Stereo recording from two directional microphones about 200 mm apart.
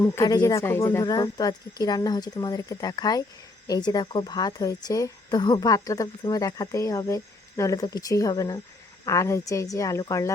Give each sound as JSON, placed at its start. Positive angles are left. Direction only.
{"t": 0.0, "sound": "a woman's voice", "side_deg": 20}